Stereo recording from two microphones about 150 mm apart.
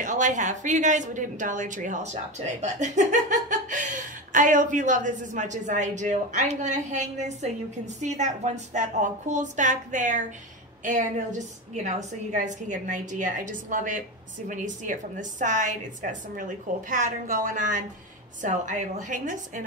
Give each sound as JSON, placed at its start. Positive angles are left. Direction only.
{"t": 0.0, "sound": "speech", "side_deg": -55}